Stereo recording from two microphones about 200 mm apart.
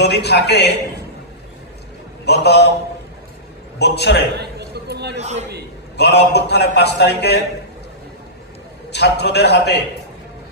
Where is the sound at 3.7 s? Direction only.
55° left (ahead or behind).